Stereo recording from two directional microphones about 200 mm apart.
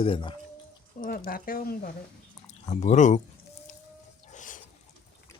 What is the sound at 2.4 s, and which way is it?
Speech, 35° left (ahead or behind).